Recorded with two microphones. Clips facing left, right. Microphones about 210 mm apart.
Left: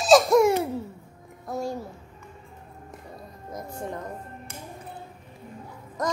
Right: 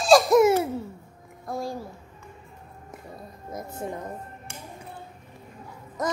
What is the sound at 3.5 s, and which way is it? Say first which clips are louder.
Babbling: right 1 dB; 5° right (ahead or behind).